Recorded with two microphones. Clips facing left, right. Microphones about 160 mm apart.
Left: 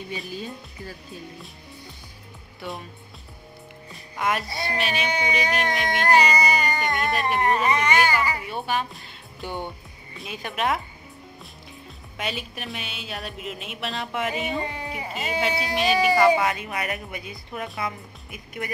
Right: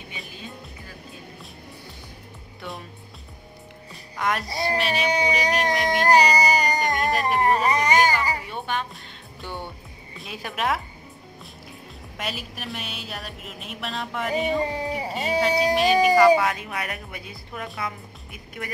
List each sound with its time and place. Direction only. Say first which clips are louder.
2.6 s a woman's voice: left 2 dB; centre (ahead or behind)
3.9 s music: even; centre (ahead or behind)
4.7 s a woman's voice: right 1 dB; centre (ahead or behind)
5.0 s speech: right 3 dB; 35° right (ahead or behind)
5.9 s music: right 2 dB; 35° right (ahead or behind)
7.3 s speech: right 1 dB; 35° right (ahead or behind)
8.5 s speech: left 2 dB; 5° left (ahead or behind)
9.4 s speech: left 3 dB; 15° left (ahead or behind)
10.1 s a woman's voice: left 1 dB; centre (ahead or behind)
12.2 s a woman's voice: left 2 dB; centre (ahead or behind)
14.7 s speech: right 5 dB; 35° right (ahead or behind)
15.4 s a woman's voice: right 4 dB; centre (ahead or behind)